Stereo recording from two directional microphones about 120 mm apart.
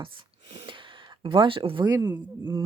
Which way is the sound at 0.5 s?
40° right (ahead or behind).